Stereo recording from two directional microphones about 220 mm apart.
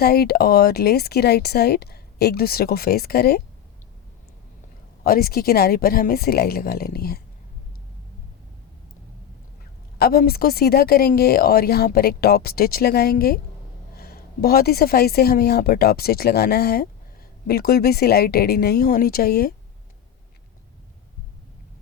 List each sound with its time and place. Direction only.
0.0 s speech: 45° left (ahead or behind)
5.0 s speech: 45° left (ahead or behind)
10.0 s speech: 45° left (ahead or behind)